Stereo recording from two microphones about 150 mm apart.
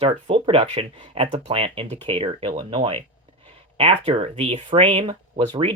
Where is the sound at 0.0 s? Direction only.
40° right (ahead or behind).